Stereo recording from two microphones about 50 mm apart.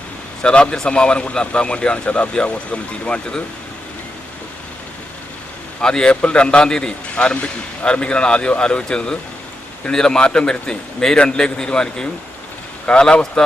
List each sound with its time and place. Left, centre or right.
0.4 s a man's voice: centre
5.8 s a man's voice: centre